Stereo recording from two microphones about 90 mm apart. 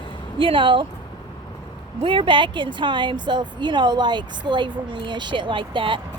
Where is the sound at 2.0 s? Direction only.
70° right (ahead or behind).